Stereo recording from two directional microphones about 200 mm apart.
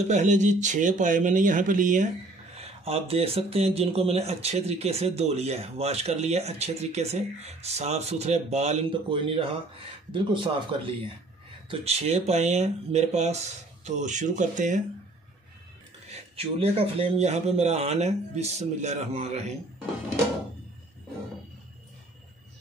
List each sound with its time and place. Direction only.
0.1 s speech: 35° right (ahead or behind)
16.1 s speech: 30° right (ahead or behind)